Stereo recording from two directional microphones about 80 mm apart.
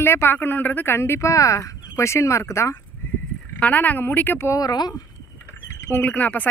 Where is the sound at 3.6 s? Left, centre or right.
Left.